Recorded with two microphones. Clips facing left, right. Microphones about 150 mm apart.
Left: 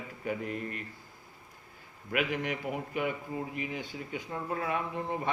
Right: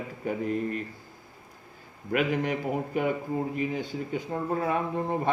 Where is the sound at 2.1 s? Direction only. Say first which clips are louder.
Right 5 dB; 35° right (ahead or behind).